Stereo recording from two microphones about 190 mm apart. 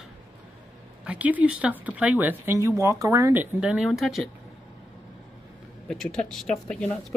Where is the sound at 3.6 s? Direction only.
5° right (ahead or behind).